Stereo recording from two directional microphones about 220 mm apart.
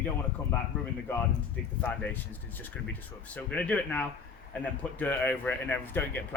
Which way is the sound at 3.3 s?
5° left (ahead or behind).